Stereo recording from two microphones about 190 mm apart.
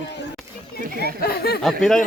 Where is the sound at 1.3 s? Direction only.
55° left (ahead or behind).